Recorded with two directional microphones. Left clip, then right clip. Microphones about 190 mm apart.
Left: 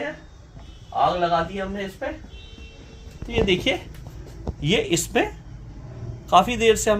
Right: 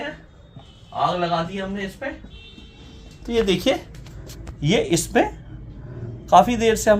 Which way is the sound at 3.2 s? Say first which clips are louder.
Right 2 dB; 35° right (ahead or behind).